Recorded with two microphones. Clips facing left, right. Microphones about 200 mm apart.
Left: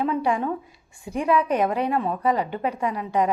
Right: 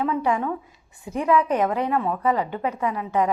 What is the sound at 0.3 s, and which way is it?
Speech, 30° left (ahead or behind).